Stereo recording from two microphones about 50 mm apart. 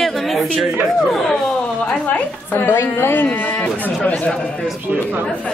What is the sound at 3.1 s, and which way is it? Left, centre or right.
Speech, left.